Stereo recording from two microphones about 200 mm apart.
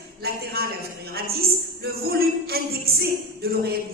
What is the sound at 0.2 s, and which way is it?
Speech, 50° right (ahead or behind).